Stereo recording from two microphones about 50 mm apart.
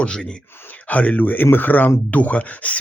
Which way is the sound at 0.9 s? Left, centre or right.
Left.